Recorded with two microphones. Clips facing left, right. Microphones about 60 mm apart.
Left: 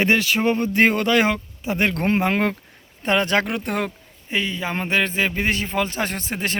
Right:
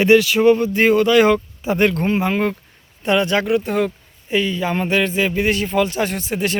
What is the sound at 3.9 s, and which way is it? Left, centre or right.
A man's voice, left.